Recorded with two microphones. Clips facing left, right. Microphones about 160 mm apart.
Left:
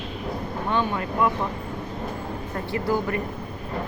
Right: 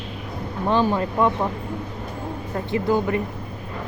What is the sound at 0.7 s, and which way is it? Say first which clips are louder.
Speech: right 5 dB; 30° right (ahead or behind).